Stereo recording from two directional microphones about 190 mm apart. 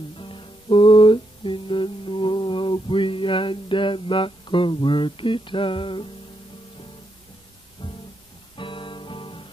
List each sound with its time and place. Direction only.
0.2 s music: 25° left (ahead or behind)
7.8 s music: 25° left (ahead or behind)